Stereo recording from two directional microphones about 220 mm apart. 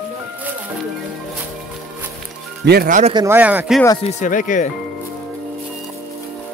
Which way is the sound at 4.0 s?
30° left (ahead or behind).